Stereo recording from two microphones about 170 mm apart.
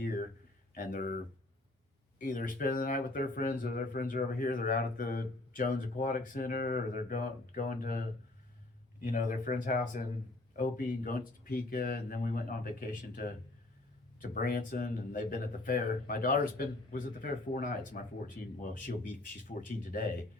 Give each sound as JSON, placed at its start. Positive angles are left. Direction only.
{"t": 0.0, "sound": "a sound", "side_deg": 55}
{"t": 0.7, "sound": "speech", "side_deg": 55}
{"t": 9.1, "sound": "speech", "side_deg": 50}
{"t": 19.5, "sound": "speech", "side_deg": 55}